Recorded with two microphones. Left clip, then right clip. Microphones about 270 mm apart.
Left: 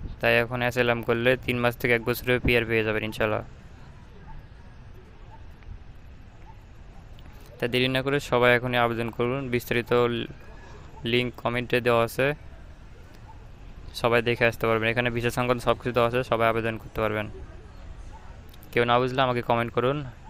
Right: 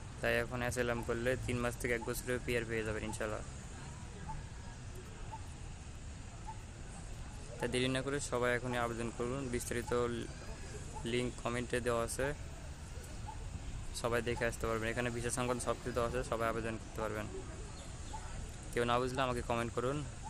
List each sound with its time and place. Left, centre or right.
0.2 s speech: left
7.6 s speech: left
13.9 s speech: left
18.7 s speech: left